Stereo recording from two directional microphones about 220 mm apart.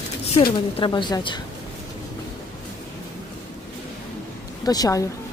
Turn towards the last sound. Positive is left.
turn(degrees=15)  # may be behind; listen again after turning